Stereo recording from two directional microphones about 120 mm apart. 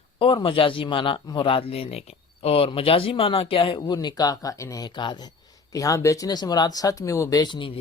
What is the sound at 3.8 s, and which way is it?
Speech, 35° left (ahead or behind).